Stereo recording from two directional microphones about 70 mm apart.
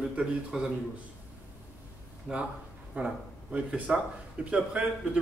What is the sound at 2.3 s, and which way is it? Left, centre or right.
A man's voice, centre.